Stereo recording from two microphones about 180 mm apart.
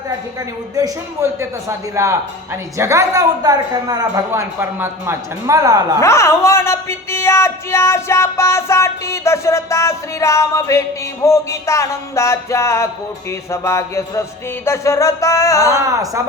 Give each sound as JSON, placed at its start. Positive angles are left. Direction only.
{"t": 0.8, "sound": "a woman's voice", "side_deg": -15}
{"t": 6.0, "sound": "speech", "side_deg": 15}
{"t": 15.8, "sound": "speech", "side_deg": -20}